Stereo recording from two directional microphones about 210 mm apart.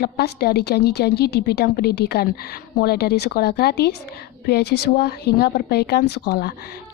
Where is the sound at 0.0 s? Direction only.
50° left (ahead or behind).